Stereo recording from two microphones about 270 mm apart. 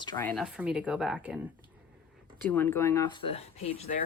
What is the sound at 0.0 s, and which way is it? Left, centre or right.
Speech, centre.